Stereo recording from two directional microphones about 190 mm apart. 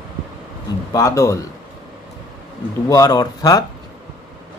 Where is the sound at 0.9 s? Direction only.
15° left (ahead or behind).